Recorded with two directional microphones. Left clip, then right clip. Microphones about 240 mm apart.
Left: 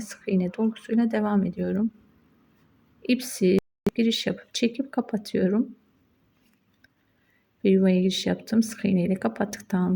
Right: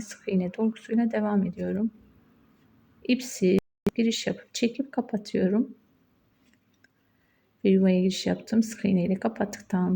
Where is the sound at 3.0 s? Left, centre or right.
Centre.